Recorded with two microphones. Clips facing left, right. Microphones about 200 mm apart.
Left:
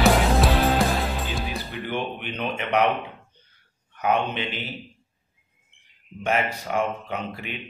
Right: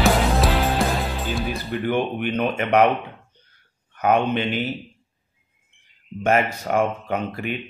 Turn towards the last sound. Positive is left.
turn(degrees=-50)  # may be behind; listen again after turning